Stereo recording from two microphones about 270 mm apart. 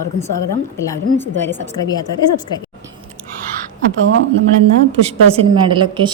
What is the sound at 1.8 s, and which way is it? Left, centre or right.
Speech, centre.